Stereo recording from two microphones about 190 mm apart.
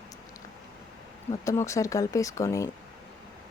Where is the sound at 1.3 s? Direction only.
15° left (ahead or behind).